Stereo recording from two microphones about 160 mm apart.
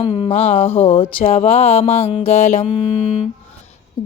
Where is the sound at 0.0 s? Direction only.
35° left (ahead or behind).